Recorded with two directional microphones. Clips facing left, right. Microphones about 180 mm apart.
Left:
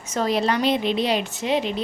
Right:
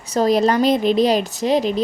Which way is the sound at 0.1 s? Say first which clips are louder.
Right 6 dB; 40° right (ahead or behind).